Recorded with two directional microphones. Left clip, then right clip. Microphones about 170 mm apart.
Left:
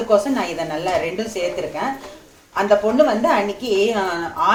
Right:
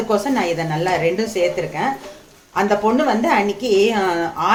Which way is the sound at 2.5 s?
50° right (ahead or behind).